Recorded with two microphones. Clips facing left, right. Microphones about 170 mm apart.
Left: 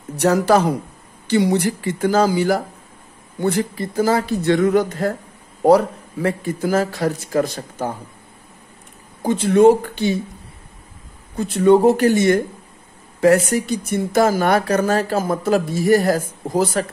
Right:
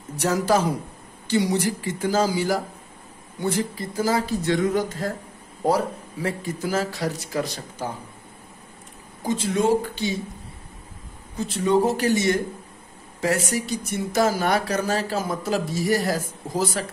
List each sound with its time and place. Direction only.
0.2 s speech: 60° left (ahead or behind)
6.2 s speech: 55° left (ahead or behind)
9.2 s speech: 60° left (ahead or behind)
11.3 s speech: 55° left (ahead or behind)